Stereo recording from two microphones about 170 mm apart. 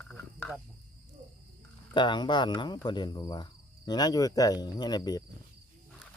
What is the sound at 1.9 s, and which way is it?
Speech, 25° left (ahead or behind).